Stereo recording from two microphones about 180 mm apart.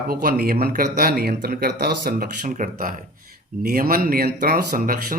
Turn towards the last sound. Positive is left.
turn(degrees=-50)  # may be behind; listen again after turning